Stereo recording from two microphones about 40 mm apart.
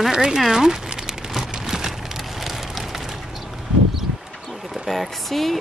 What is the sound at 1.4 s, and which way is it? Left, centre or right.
Rain on surface, centre.